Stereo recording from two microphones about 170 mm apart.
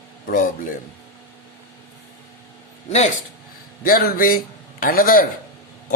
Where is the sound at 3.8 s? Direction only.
60° left (ahead or behind).